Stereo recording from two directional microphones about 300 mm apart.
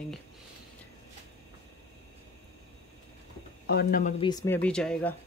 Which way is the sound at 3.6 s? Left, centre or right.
Left.